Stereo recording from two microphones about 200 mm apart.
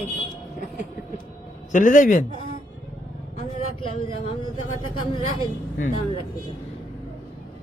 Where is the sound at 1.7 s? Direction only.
40° left (ahead or behind).